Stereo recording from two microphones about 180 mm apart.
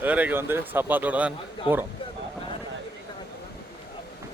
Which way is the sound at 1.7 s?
30° left (ahead or behind).